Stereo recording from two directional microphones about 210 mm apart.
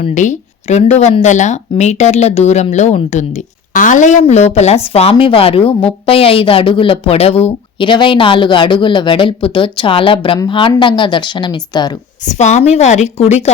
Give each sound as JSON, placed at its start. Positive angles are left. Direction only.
{"t": 0.0, "sound": "speech", "side_deg": 35}
{"t": 12.2, "sound": "speech", "side_deg": 35}